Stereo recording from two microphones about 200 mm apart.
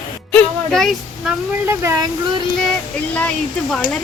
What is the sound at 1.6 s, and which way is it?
Speech, 15° right (ahead or behind).